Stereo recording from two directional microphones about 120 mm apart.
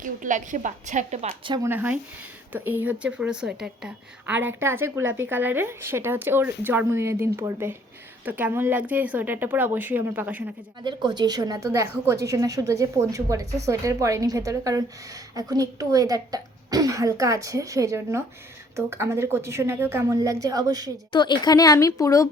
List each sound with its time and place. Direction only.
0.0 s a woman's voice: 90° right
1.6 s a woman's voice: 15° right (ahead or behind)
10.8 s a woman's voice: 40° right (ahead or behind)
21.1 s speech: 40° left (ahead or behind)